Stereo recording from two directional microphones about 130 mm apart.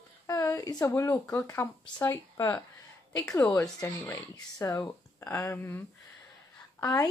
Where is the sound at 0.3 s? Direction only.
25° left (ahead or behind).